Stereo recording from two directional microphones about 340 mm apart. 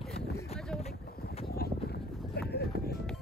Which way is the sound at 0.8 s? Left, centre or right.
Left.